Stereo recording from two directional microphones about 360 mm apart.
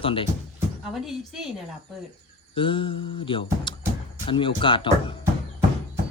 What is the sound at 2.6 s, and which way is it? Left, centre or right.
Speech, centre.